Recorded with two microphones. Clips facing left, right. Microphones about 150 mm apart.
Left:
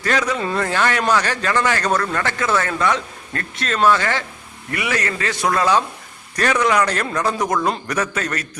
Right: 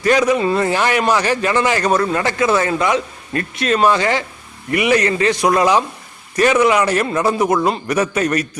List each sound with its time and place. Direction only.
0.0 s a man's voice: 15° right (ahead or behind)